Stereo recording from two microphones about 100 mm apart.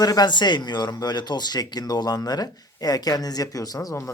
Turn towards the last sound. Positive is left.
turn(degrees=40)  # may be behind; listen again after turning